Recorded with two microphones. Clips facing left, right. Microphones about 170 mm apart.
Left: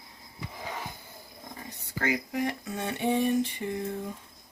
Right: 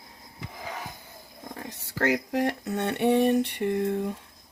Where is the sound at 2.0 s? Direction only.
70° right (ahead or behind).